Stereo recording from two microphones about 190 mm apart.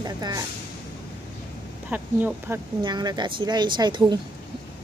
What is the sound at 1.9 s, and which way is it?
Speech, 10° right (ahead or behind).